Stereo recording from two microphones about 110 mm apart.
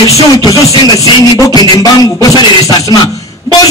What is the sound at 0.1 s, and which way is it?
Music, 30° left (ahead or behind).